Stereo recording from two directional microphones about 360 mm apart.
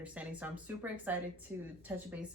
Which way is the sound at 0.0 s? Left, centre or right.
Centre.